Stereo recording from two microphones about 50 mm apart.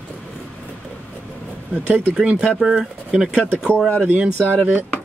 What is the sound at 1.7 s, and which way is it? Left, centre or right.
Speech, right.